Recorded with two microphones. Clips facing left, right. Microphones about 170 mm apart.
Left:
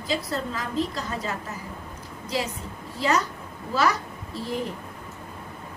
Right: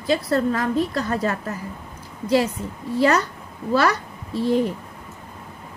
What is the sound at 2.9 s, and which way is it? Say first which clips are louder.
A woman's voice: right 6 dB; 65° right (ahead or behind).